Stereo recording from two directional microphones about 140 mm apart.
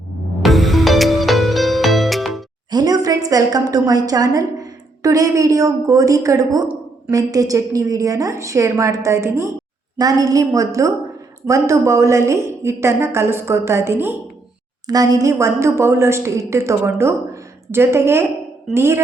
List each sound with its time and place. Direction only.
0.4 s music: centre (ahead or behind)
2.6 s a woman's voice: 30° right (ahead or behind)